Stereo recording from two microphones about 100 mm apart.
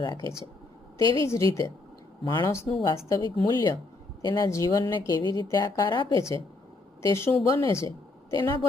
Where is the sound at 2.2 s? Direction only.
50° left (ahead or behind).